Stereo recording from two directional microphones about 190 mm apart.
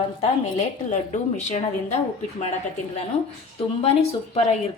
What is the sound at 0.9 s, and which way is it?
Speech, 40° left (ahead or behind).